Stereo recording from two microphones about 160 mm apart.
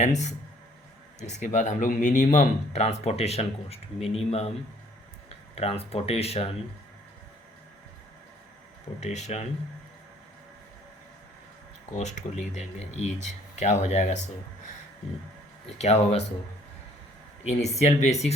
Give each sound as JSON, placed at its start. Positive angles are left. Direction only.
{"t": 0.0, "sound": "speech", "side_deg": 45}
{"t": 5.5, "sound": "speech", "side_deg": 40}
{"t": 9.0, "sound": "speech", "side_deg": 45}
{"t": 11.9, "sound": "speech", "side_deg": 45}
{"t": 15.8, "sound": "speech", "side_deg": 40}
{"t": 17.4, "sound": "speech", "side_deg": 45}